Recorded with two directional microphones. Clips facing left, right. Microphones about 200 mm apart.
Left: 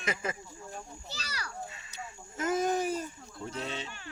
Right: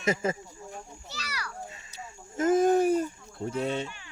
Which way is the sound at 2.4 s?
50° right (ahead or behind).